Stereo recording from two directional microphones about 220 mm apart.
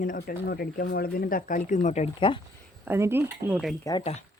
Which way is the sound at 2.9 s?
10° right (ahead or behind).